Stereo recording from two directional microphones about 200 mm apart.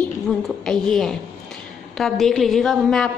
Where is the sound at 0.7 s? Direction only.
5° left (ahead or behind).